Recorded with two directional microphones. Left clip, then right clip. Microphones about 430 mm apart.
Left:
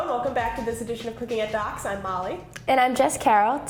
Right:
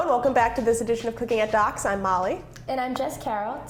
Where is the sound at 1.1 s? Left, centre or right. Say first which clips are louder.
Right 1 dB; right.